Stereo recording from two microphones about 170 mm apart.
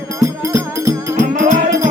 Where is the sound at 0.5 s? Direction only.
20° right (ahead or behind).